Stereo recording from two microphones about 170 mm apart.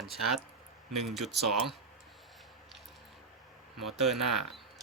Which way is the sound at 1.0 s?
Centre (ahead or behind).